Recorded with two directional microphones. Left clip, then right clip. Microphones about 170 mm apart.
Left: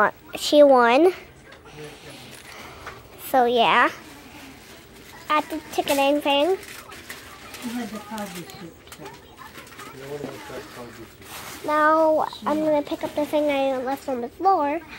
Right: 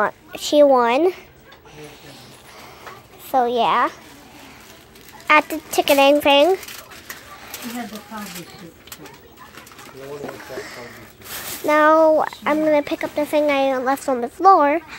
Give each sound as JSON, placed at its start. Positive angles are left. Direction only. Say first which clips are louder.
{"t": 0.0, "sound": "a woman's voice", "louder": "even", "side_deg": 0}
{"t": 3.3, "sound": "a woman's voice", "louder": "right 1 dB", "side_deg": 0}
{"t": 5.2, "sound": "speech", "louder": "right 8 dB", "side_deg": -30}
{"t": 11.6, "sound": "speech", "louder": "right 5 dB", "side_deg": -25}
{"t": 12.2, "sound": "speech", "louder": "right 4 dB", "side_deg": -40}